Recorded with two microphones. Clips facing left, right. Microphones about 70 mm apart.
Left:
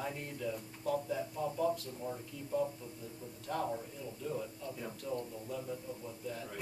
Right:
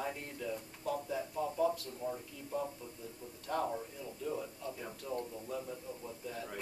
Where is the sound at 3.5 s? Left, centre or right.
Centre.